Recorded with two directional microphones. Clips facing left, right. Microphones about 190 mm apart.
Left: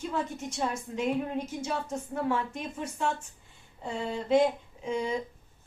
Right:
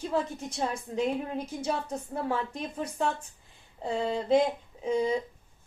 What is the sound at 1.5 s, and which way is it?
A woman's voice, 35° right (ahead or behind).